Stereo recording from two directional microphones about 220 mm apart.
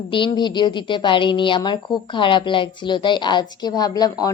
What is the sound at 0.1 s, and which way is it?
A woman's voice, 20° left (ahead or behind).